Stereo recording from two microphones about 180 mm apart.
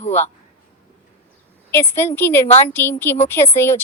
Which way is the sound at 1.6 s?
10° left (ahead or behind).